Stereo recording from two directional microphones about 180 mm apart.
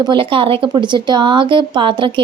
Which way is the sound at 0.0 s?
25° right (ahead or behind).